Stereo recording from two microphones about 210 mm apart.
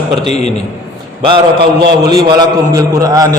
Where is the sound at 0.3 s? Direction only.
30° left (ahead or behind).